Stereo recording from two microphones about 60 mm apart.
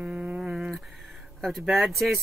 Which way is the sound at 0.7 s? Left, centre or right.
Centre.